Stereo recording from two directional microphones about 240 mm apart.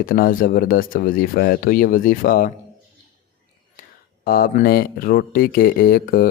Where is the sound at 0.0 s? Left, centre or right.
Left.